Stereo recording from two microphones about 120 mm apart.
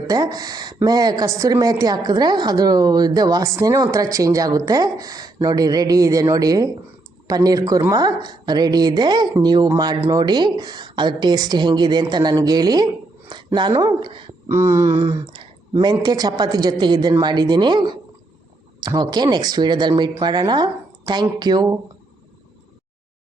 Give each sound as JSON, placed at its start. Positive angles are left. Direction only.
{"t": 0.1, "sound": "speech", "side_deg": -35}
{"t": 14.4, "sound": "a sound", "side_deg": -25}
{"t": 15.8, "sound": "speech", "side_deg": -35}